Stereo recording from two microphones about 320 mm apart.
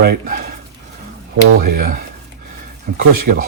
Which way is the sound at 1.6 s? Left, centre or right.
Right.